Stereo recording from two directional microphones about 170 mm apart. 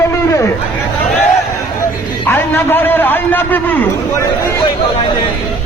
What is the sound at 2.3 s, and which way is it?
A man's voice, 15° left (ahead or behind).